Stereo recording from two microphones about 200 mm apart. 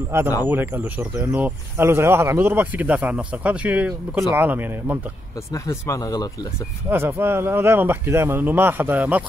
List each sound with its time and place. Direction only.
0.1 s speech: 10° right (ahead or behind)
5.5 s speech: 15° left (ahead or behind)
6.9 s speech: 10° right (ahead or behind)